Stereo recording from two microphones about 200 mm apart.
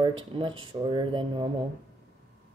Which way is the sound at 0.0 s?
25° right (ahead or behind).